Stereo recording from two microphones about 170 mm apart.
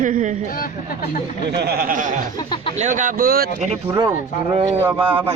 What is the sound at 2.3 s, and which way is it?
Speech, 25° left (ahead or behind).